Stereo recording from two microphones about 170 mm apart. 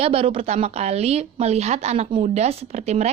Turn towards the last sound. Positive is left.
turn(degrees=-40)  # may be behind; listen again after turning